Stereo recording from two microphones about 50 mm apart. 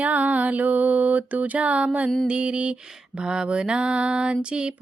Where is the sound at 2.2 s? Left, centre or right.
Right.